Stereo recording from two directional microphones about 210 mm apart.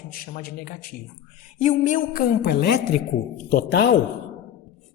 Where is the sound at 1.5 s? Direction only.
35° left (ahead or behind).